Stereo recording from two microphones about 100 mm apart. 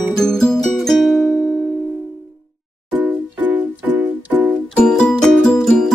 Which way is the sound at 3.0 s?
20° right (ahead or behind).